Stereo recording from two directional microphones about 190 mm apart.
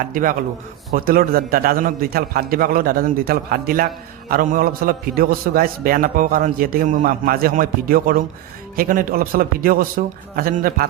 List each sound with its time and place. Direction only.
0.0 s a man's voice: 45° right (ahead or behind)